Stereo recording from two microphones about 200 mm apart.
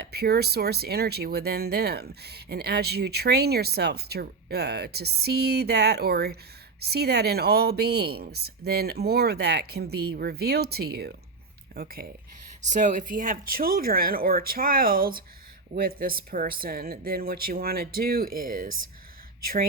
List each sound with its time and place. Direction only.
0.0 s speech: 55° right (ahead or behind)
12.7 s speech: 40° right (ahead or behind)